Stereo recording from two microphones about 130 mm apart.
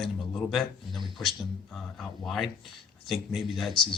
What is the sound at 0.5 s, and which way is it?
Speech, centre (ahead or behind).